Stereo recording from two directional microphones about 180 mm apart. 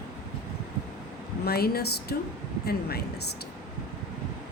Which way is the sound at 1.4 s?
60° left (ahead or behind).